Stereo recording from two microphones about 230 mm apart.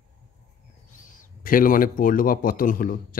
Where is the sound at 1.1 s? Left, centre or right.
Left.